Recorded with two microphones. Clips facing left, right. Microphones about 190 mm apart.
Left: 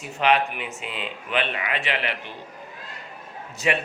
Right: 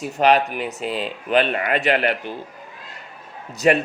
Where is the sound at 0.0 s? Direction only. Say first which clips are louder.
Right 5 dB; 40° right (ahead or behind).